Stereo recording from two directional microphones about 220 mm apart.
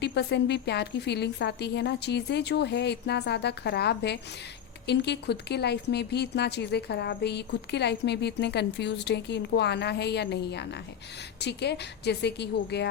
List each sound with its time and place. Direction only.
0.0 s speech: 50° left (ahead or behind)